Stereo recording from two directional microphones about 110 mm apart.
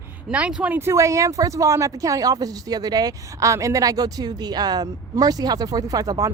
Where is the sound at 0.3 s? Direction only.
10° right (ahead or behind).